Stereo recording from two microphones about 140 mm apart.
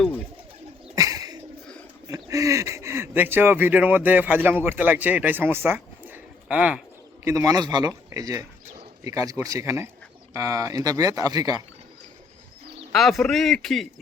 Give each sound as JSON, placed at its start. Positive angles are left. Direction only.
{"t": 0.9, "sound": "bird", "side_deg": -25}
{"t": 2.0, "sound": "speech", "side_deg": -25}
{"t": 7.3, "sound": "speech", "side_deg": -25}
{"t": 12.9, "sound": "a man's voice", "side_deg": 0}